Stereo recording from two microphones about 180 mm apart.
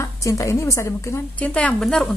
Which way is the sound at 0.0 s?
15° left (ahead or behind).